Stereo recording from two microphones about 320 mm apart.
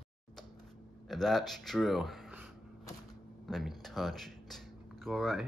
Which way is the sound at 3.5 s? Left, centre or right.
Centre.